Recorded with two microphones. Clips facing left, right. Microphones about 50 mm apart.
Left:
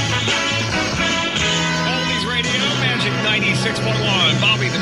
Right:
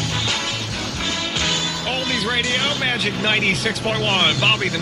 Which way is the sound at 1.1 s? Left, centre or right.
Left.